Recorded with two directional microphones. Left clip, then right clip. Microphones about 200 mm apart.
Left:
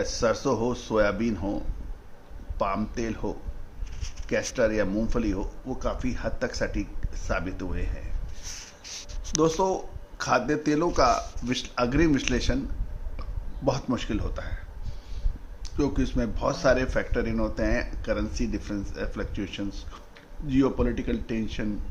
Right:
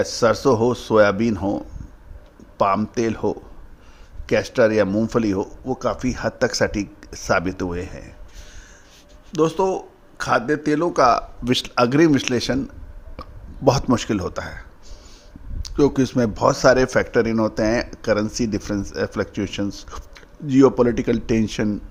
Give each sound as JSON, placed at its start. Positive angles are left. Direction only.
{"t": 0.0, "sound": "speech", "side_deg": -40}
{"t": 9.3, "sound": "speech", "side_deg": -25}
{"t": 13.7, "sound": "speech", "side_deg": -50}
{"t": 15.6, "sound": "speech", "side_deg": -45}